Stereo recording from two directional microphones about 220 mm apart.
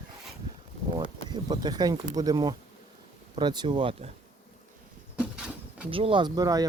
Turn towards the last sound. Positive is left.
turn(degrees=-15)  # may be behind; listen again after turning